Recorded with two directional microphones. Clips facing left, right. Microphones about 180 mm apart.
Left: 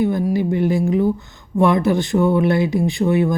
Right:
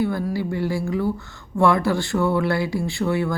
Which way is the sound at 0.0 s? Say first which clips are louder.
Left 5 dB; 20° left (ahead or behind).